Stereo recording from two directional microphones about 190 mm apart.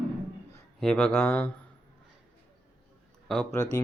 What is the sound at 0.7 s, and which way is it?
Speech, 5° left (ahead or behind).